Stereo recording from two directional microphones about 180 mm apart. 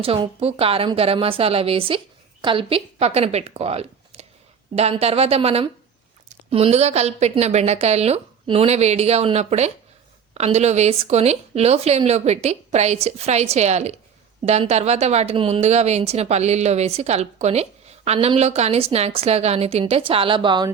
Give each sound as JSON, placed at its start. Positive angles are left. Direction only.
{"t": 0.0, "sound": "a woman's voice", "side_deg": -30}